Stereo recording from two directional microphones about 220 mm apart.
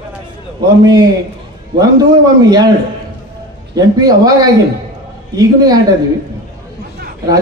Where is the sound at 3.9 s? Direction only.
15° right (ahead or behind).